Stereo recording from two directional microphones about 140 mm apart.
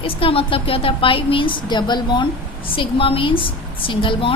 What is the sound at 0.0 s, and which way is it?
A woman's voice, 40° left (ahead or behind).